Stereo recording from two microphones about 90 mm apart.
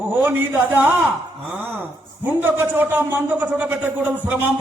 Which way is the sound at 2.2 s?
25° right (ahead or behind).